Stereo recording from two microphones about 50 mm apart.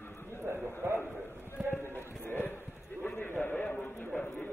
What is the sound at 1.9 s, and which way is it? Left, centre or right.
Run, left.